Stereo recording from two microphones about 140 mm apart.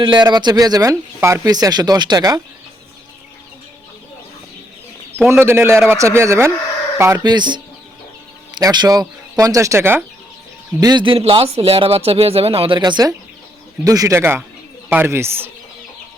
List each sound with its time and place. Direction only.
0.0 s speech: 30° right (ahead or behind)
5.3 s speech: 15° right (ahead or behind)
7.2 s speech: 30° right (ahead or behind)
10.8 s speech: 30° right (ahead or behind)